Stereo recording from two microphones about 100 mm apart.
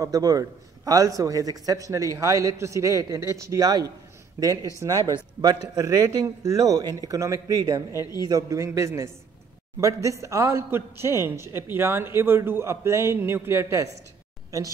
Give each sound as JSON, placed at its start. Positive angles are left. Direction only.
{"t": 0.0, "sound": "a man's voice", "side_deg": -40}
{"t": 7.9, "sound": "a woman's voice", "side_deg": 40}
{"t": 8.2, "sound": "a man's voice", "side_deg": -40}